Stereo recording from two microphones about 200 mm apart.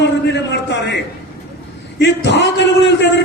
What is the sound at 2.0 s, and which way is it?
Speech, 60° left (ahead or behind).